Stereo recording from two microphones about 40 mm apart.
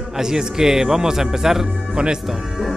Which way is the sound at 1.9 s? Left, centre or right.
Right.